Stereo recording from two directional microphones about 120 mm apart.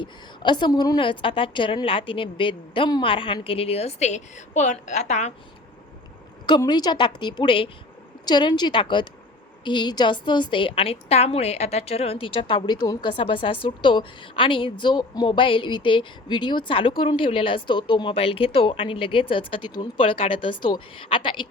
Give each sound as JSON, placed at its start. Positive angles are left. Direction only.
{"t": 0.0, "sound": "a woman's voice", "side_deg": 40}
{"t": 0.9, "sound": "a woman's voice", "side_deg": 45}
{"t": 6.7, "sound": "a woman's voice", "side_deg": 35}